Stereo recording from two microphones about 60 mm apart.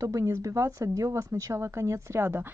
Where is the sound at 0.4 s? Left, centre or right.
Right.